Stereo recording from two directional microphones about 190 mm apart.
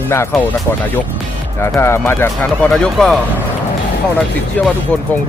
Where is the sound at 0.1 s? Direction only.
15° left (ahead or behind).